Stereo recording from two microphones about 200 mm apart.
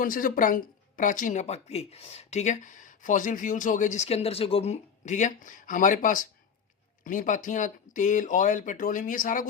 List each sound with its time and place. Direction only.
0.0 s speech: 45° left (ahead or behind)